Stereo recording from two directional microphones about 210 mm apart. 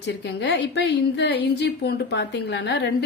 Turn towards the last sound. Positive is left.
turn(degrees=55)  # may be behind; listen again after turning